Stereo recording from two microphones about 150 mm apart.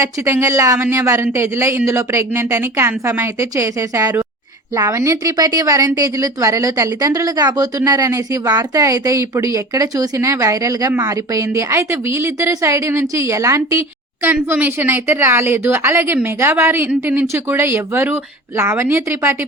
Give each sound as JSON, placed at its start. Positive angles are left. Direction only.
{"t": 0.0, "sound": "a woman's voice", "side_deg": -20}